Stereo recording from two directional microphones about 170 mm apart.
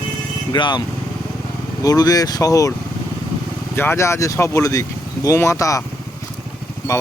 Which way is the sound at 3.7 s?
15° left (ahead or behind).